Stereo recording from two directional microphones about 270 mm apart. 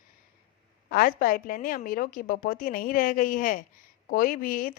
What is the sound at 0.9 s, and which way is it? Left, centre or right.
A woman's voice, left.